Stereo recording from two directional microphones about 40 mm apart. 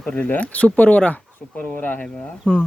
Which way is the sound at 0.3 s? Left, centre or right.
Left.